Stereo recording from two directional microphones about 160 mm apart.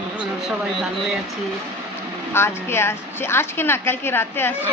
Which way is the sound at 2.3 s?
15° left (ahead or behind).